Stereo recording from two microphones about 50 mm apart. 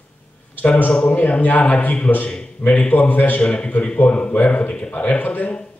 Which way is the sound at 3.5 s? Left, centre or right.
Left.